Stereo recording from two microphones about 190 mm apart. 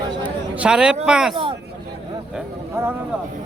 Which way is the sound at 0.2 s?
5° right (ahead or behind).